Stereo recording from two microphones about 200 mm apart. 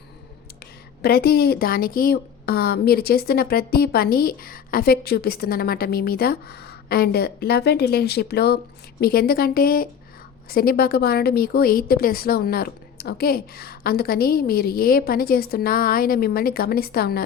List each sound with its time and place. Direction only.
1.0 s speech: 50° left (ahead or behind)